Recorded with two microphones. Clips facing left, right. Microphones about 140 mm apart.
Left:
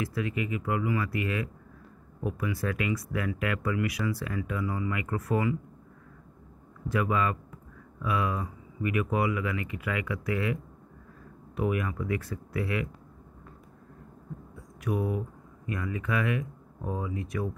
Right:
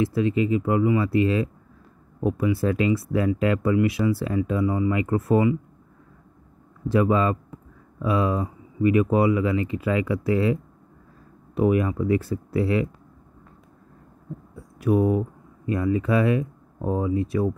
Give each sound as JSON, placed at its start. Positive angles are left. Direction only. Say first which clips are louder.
{"t": 0.0, "sound": "speech", "louder": "right 9 dB", "side_deg": -25}
{"t": 6.9, "sound": "speech", "louder": "right 7 dB", "side_deg": -30}
{"t": 14.8, "sound": "speech", "louder": "right 10 dB", "side_deg": -30}